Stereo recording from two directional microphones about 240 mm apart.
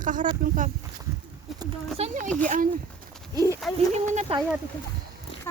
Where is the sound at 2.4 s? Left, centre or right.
Right.